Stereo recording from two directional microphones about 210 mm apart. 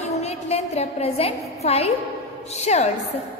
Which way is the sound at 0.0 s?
30° left (ahead or behind).